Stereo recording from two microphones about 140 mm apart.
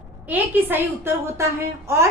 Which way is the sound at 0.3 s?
15° right (ahead or behind).